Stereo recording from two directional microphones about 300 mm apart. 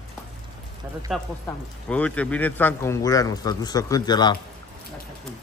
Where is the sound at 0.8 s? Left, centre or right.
Centre.